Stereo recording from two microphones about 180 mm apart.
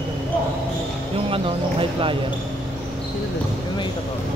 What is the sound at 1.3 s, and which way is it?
Speech, 30° right (ahead or behind).